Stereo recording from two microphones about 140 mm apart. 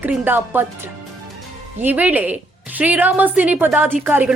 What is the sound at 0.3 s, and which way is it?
A woman's voice, 15° right (ahead or behind).